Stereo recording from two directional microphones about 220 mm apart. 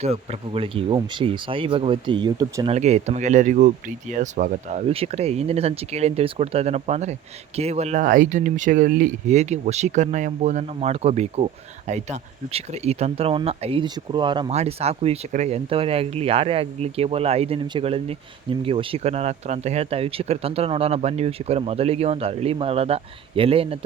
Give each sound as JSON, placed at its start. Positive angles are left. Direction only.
{"t": 0.0, "sound": "speech", "side_deg": -30}
{"t": 2.7, "sound": "speech", "side_deg": -30}
{"t": 12.5, "sound": "speech", "side_deg": -30}